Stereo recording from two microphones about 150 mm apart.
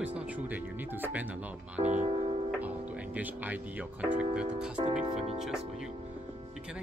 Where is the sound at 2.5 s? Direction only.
10° right (ahead or behind).